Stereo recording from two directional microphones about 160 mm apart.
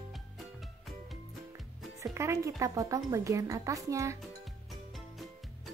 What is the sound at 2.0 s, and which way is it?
Speech, 15° right (ahead or behind).